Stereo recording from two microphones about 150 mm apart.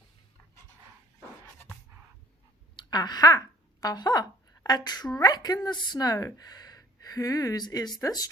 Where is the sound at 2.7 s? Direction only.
25° left (ahead or behind).